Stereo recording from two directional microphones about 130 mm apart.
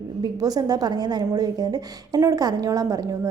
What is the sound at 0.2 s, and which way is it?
A woman's voice, 30° right (ahead or behind).